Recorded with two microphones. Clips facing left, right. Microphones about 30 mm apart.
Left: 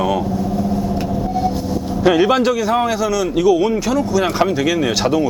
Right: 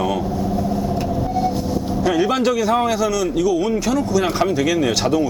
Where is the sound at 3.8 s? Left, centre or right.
Centre.